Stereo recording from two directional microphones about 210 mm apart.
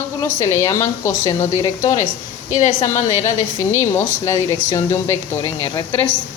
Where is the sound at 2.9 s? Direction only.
35° left (ahead or behind).